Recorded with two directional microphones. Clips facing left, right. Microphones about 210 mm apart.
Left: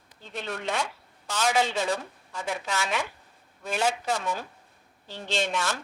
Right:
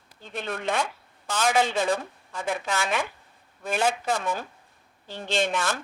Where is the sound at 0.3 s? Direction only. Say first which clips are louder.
Right 3 dB; 55° right (ahead or behind).